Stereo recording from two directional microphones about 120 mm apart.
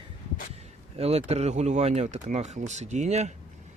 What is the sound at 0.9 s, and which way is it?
Speech, 60° right (ahead or behind).